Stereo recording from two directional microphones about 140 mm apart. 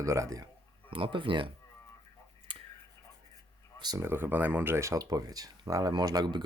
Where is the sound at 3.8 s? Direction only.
30° right (ahead or behind).